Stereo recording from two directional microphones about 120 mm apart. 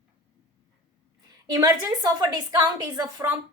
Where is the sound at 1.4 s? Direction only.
30° right (ahead or behind).